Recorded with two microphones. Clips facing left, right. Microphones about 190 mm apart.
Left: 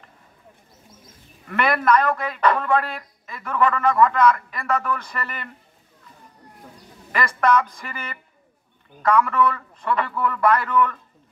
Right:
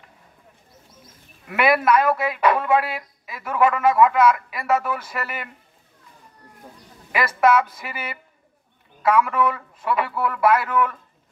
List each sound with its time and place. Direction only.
1.5 s speech: 10° right (ahead or behind)
7.1 s speech: 10° right (ahead or behind)